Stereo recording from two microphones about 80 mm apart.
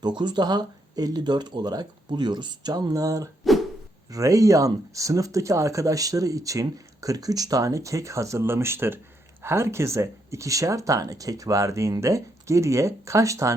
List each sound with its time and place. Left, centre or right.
0.0 s speech: right
3.4 s a sound: centre
4.1 s speech: right